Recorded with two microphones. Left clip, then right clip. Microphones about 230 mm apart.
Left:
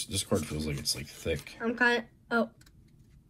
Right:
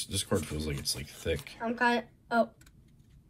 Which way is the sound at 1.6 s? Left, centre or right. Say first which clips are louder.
Left 2 dB; left.